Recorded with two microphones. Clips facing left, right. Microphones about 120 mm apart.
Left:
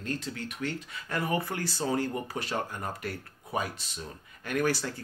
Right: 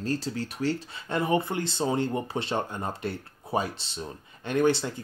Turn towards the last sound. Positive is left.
turn(degrees=-20)  # may be behind; listen again after turning